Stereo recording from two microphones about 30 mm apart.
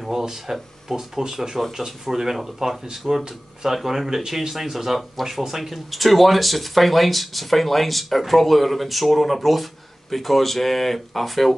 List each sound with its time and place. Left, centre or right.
0.1 s speech: centre